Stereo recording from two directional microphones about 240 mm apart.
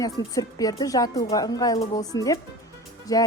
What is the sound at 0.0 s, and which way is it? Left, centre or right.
Speech, centre.